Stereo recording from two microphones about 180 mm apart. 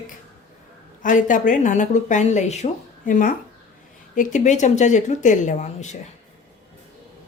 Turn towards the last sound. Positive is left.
turn(degrees=40)  # may be behind; listen again after turning